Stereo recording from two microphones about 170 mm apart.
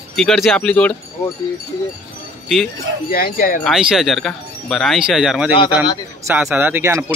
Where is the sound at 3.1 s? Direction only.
60° left (ahead or behind).